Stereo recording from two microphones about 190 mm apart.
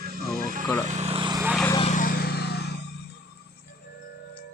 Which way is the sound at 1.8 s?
40° left (ahead or behind).